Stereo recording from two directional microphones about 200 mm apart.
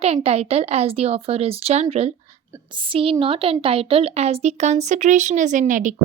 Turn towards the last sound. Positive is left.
turn(degrees=-40)  # may be behind; listen again after turning